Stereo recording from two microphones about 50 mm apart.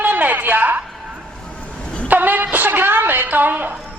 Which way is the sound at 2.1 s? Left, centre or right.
Right.